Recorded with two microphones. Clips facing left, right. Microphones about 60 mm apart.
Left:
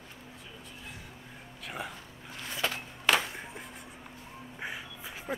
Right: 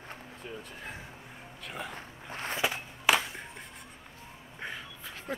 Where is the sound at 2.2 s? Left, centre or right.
Right.